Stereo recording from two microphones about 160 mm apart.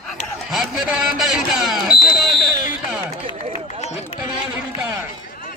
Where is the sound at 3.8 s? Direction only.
40° left (ahead or behind).